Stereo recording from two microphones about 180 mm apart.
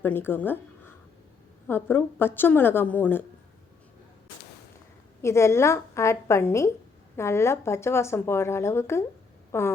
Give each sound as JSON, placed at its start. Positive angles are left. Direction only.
{"t": 0.0, "sound": "a woman's voice", "side_deg": 10}
{"t": 5.2, "sound": "speech", "side_deg": 15}